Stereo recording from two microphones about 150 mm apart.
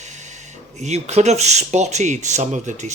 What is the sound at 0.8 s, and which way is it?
Speech, 50° right (ahead or behind).